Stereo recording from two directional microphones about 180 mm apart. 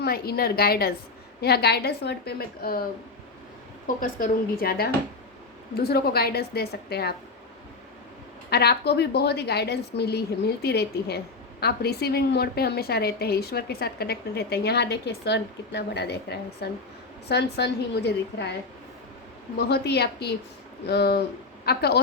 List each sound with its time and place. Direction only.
0.0 s a woman's voice: 60° left (ahead or behind)
3.8 s a woman's voice: 50° left (ahead or behind)
8.4 s a woman's voice: 65° left (ahead or behind)
19.5 s a woman's voice: 65° left (ahead or behind)